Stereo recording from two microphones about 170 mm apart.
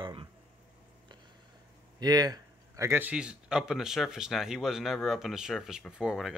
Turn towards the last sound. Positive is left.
turn(degrees=-5)  # may be behind; listen again after turning